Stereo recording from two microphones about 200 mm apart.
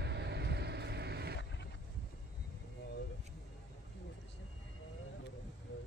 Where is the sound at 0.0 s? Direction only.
55° right (ahead or behind).